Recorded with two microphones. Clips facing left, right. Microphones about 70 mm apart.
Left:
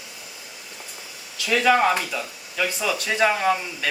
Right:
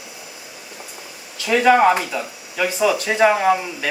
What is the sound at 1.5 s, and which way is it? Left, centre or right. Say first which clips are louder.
Speech: right 5 dB; centre.